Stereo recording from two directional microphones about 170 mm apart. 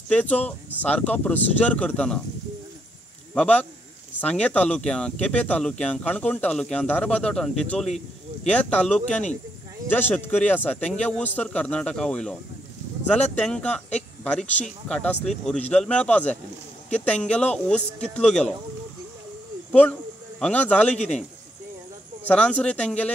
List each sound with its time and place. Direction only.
0.1 s speech: 10° left (ahead or behind)
3.3 s speech: 10° left (ahead or behind)
9.0 s speech: 45° left (ahead or behind)
9.8 s speech: 10° left (ahead or behind)
13.4 s speech: 5° left (ahead or behind)
19.7 s a man's voice: 10° left (ahead or behind)
22.3 s speech: 5° left (ahead or behind)